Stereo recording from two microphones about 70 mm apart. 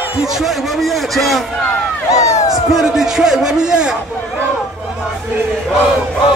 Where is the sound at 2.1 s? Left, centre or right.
Left.